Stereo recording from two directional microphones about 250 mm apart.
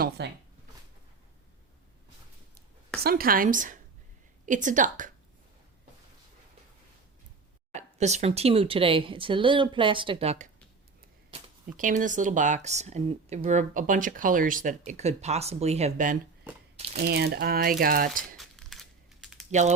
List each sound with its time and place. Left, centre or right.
0.2 s speech: right
3.0 s speech: right
7.7 s speech: right
11.8 s speech: right
16.7 s crumpling: right
17.0 s speech: right
18.3 s crumpling: centre
19.5 s speech: right